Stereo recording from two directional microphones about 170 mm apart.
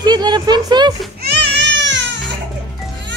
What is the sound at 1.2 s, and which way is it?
Baby cry, 80° right.